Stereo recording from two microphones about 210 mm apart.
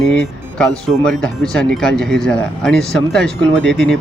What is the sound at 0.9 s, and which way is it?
Speech, 5° left (ahead or behind).